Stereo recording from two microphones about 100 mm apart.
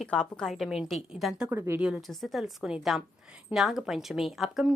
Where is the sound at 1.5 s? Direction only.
25° right (ahead or behind).